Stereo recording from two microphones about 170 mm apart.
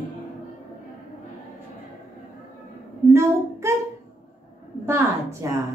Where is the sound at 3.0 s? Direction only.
15° right (ahead or behind).